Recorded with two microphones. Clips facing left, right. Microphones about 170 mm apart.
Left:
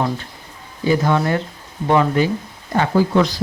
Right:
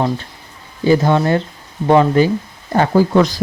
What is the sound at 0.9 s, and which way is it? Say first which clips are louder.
Speech: right 4 dB; 30° right (ahead or behind).